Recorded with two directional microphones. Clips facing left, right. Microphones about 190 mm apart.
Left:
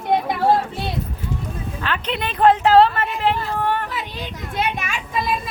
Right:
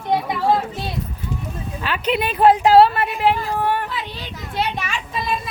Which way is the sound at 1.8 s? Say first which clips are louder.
Right 4 dB; 10° right (ahead or behind).